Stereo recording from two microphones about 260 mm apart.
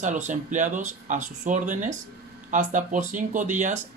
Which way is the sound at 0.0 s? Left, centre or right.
Right.